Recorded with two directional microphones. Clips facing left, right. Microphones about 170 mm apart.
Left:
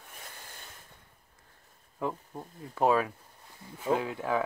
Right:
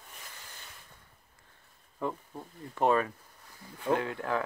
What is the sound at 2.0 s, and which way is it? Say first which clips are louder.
Speech: left 1 dB; 10° left (ahead or behind).